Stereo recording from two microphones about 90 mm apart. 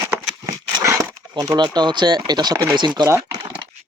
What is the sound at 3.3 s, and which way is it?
Crumpling, 55° right (ahead or behind).